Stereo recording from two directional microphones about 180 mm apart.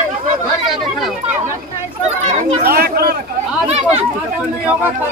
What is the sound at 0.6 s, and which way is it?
Speech, centre (ahead or behind).